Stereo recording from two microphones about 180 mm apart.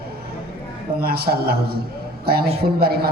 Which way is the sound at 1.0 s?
60° right (ahead or behind).